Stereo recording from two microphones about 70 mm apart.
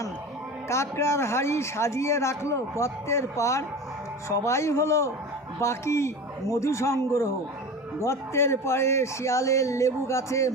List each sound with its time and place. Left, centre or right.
0.7 s a man's voice: left